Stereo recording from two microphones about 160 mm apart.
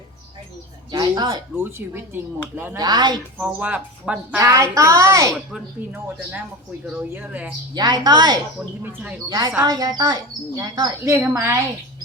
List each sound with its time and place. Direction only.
0.9 s speech: 25° right (ahead or behind)
1.5 s speech: 15° right (ahead or behind)
2.7 s speech: 25° right (ahead or behind)
3.3 s speech: 10° right (ahead or behind)
4.4 s speech: 20° right (ahead or behind)
6.8 s speech: 10° right (ahead or behind)
7.8 s speech: 25° right (ahead or behind)
9.6 s speech: 25° right (ahead or behind)